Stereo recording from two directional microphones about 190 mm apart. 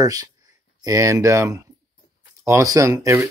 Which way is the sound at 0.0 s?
20° right (ahead or behind).